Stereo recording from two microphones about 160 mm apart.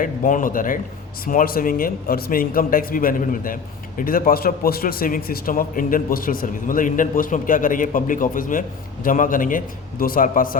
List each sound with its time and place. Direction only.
0.0 s speech: 55° left (ahead or behind)